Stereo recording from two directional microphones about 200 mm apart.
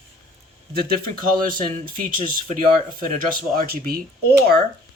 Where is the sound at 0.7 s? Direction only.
45° right (ahead or behind).